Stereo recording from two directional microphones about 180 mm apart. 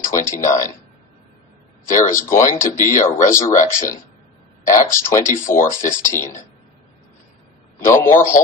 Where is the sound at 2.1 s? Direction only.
15° left (ahead or behind).